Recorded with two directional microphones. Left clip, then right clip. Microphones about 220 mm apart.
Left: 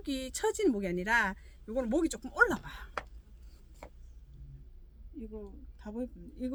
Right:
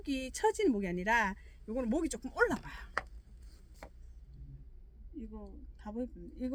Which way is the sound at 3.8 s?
25° right (ahead or behind).